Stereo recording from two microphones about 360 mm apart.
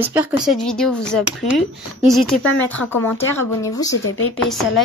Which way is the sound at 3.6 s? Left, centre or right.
Centre.